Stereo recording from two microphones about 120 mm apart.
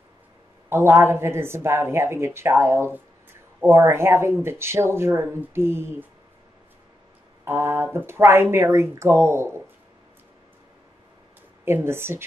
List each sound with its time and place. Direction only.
0.7 s speech: 20° right (ahead or behind)
7.4 s speech: 20° right (ahead or behind)
11.6 s speech: 20° right (ahead or behind)